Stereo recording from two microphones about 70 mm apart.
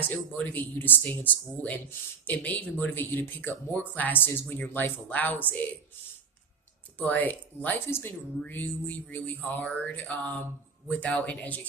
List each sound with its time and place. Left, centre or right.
0.1 s speech: left
7.0 s speech: left